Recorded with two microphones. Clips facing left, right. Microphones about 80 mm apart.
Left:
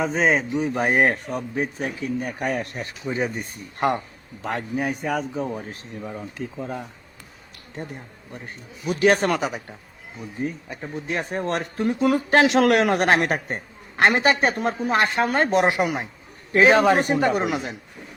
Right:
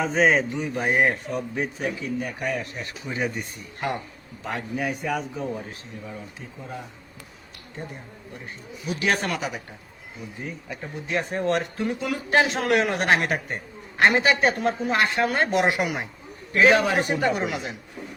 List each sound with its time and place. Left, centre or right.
0.0 s mantra: centre
0.7 s a man's voice: left
2.8 s speech: left
3.8 s a man's voice: left
8.9 s a woman's voice: left
11.1 s a woman's voice: left
12.4 s a man's voice: left
16.8 s a woman's voice: left